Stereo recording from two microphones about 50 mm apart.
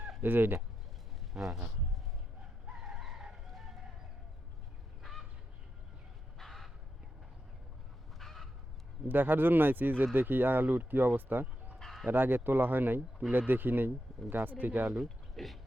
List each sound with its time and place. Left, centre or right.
0.2 s speech: right
1.3 s speech: centre
2.7 s chicken: centre
6.4 s crow: centre
8.2 s goose: centre
9.0 s speech: right
11.8 s chicken: centre
12.0 s speech: right
14.9 s speech: centre